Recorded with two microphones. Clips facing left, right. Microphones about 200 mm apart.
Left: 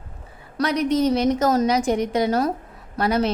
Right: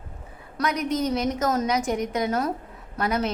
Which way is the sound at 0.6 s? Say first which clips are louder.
Left 5 dB; 30° left (ahead or behind).